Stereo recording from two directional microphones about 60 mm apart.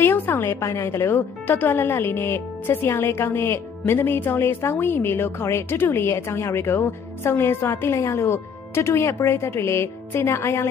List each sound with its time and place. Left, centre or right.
0.0 s a sound: left
0.5 s speech: left
0.8 s speech: left